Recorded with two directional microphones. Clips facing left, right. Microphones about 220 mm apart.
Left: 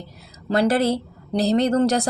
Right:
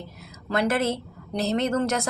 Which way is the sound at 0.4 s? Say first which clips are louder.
Left 5 dB; 30° left (ahead or behind).